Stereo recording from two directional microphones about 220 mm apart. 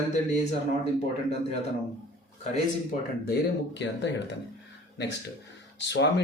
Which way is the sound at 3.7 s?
55° left (ahead or behind).